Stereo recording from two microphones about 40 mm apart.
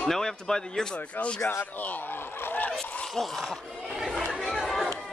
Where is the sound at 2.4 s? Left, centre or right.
Left.